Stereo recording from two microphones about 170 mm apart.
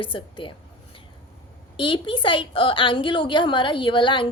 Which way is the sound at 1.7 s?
30° left (ahead or behind).